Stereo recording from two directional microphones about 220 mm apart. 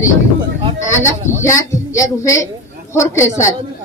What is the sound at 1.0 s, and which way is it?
A man's voice, 15° left (ahead or behind).